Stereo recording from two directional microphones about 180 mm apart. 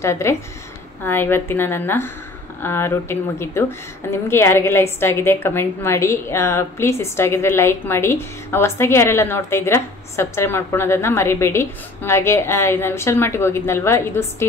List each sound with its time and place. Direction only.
0.0 s a woman's voice: 15° left (ahead or behind)